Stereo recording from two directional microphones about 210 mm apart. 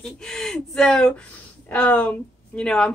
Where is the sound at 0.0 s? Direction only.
5° left (ahead or behind).